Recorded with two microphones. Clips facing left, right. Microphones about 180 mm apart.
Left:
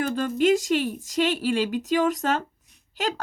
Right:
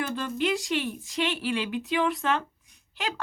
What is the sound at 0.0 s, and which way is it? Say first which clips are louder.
A woman's voice: left 6 dB; 45° left (ahead or behind).